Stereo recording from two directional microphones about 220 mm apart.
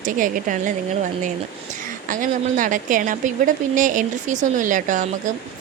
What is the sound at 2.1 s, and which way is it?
Speech, 35° right (ahead or behind).